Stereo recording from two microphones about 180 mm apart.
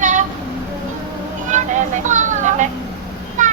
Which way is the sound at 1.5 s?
45° right (ahead or behind).